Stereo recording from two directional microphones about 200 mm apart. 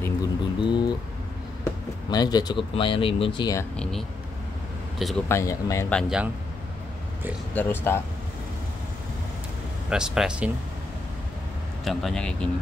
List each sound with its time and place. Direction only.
0.2 s a sound: 20° left (ahead or behind)
1.6 s speech: 20° left (ahead or behind)
3.7 s speech: 5° left (ahead or behind)
5.3 s speech: 15° left (ahead or behind)
7.5 s speech: 10° left (ahead or behind)
9.8 s speech: 5° right (ahead or behind)
11.8 s speech: centre (ahead or behind)